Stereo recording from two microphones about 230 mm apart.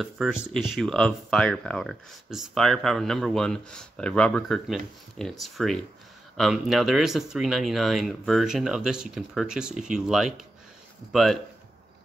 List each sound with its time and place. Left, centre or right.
0.0 s speech: centre